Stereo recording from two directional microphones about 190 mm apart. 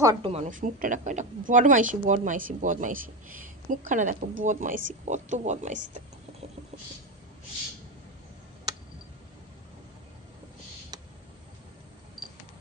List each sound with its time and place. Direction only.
0.0 s speech: 20° right (ahead or behind)
0.3 s speech: 40° right (ahead or behind)
10.9 s a sound: 20° right (ahead or behind)
12.2 s camera: centre (ahead or behind)